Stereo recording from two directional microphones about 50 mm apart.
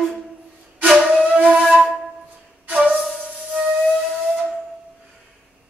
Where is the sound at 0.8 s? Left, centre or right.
Right.